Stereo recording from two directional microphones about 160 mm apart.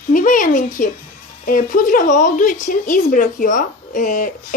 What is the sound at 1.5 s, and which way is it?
Speech, 55° left (ahead or behind).